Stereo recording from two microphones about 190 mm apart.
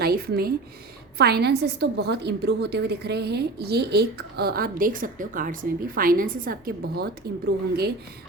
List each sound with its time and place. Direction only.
0.0 s a woman's voice: 55° right (ahead or behind)